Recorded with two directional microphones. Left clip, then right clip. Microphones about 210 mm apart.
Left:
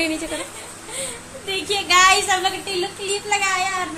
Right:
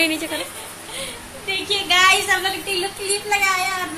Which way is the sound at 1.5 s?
55° left (ahead or behind).